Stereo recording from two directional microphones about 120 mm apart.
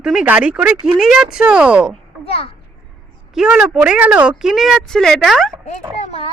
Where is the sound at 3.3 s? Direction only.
5° right (ahead or behind).